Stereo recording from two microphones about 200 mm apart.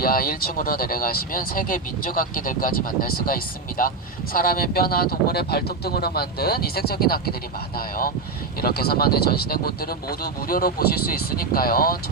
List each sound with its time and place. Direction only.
0.0 s speech: 45° left (ahead or behind)